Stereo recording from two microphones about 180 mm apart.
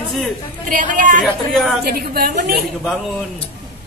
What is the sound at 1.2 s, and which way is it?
Speech, centre (ahead or behind).